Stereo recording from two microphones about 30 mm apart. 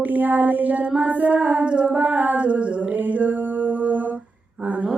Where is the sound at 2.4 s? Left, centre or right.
Right.